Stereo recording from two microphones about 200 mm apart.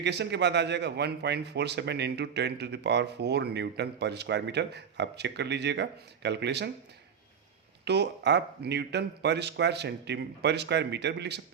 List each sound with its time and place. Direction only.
0.0 s a man's voice: 55° right (ahead or behind)
7.9 s a man's voice: 60° right (ahead or behind)